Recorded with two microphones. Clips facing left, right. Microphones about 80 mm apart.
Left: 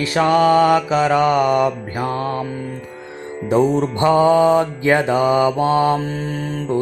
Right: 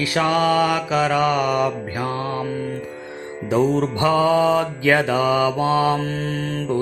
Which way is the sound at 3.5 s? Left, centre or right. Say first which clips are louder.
Left 2 dB; left.